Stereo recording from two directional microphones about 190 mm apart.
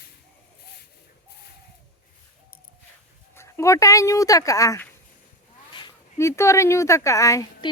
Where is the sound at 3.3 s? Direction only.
15° left (ahead or behind).